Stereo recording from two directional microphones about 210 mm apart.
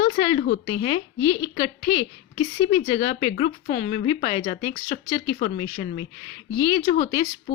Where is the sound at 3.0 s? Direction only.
45° left (ahead or behind).